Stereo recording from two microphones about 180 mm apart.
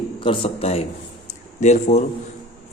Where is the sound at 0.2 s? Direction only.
30° left (ahead or behind).